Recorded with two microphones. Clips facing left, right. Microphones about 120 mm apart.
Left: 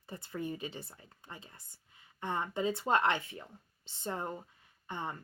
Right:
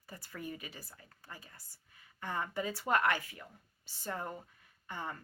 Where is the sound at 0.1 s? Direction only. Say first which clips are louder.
Left 5 dB; 25° left (ahead or behind).